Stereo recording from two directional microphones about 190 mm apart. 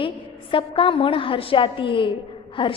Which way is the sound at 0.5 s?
25° left (ahead or behind).